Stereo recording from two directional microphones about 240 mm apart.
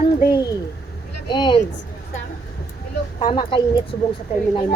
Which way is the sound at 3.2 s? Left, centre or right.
Centre.